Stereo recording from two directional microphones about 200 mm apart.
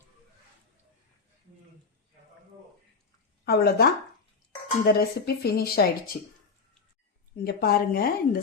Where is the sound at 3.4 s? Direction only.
50° left (ahead or behind).